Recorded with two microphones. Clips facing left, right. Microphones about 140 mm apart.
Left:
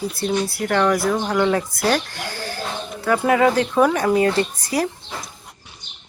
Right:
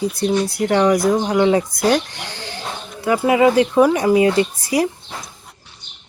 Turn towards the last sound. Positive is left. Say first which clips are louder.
# right 4 dB
turn(degrees=-10)  # may be behind; listen again after turning